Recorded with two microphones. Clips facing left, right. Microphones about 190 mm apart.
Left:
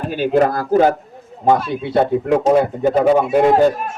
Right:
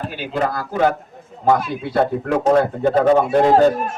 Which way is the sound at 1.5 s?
25° left (ahead or behind).